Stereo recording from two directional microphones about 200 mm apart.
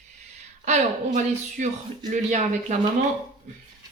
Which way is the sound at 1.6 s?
40° right (ahead or behind).